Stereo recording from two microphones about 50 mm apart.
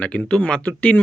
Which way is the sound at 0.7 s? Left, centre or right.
Left.